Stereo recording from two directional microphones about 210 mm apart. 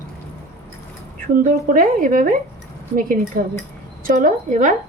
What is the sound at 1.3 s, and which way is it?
A woman's voice, 40° right (ahead or behind).